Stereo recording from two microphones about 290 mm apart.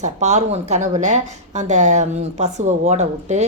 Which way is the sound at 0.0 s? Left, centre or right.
Right.